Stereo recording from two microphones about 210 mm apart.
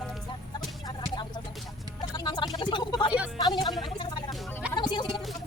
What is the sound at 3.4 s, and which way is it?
Speech, 20° left (ahead or behind).